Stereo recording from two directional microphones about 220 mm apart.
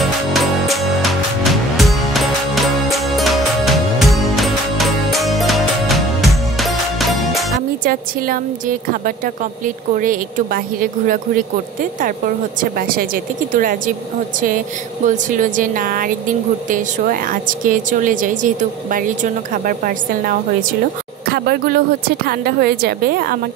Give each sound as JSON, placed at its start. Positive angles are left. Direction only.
{"t": 0.3, "sound": "music", "side_deg": 0}
{"t": 7.8, "sound": "speech", "side_deg": -40}
{"t": 12.5, "sound": "speech", "side_deg": -40}
{"t": 15.0, "sound": "a woman's voice", "side_deg": -35}